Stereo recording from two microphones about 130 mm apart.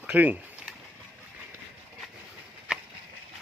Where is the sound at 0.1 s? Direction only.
10° right (ahead or behind).